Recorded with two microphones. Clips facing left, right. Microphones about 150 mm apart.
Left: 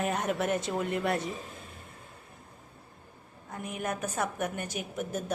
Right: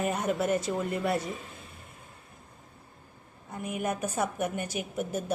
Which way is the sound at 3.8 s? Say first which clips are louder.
Right 2 dB; 10° right (ahead or behind).